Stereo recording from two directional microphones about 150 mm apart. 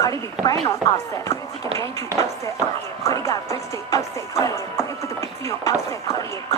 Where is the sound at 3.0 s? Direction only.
20° left (ahead or behind).